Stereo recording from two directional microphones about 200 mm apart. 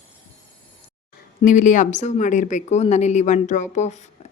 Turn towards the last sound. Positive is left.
turn(degrees=35)  # may be behind; listen again after turning